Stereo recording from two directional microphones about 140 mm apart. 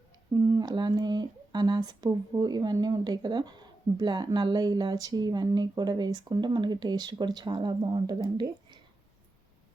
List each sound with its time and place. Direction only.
0.3 s speech: 30° right (ahead or behind)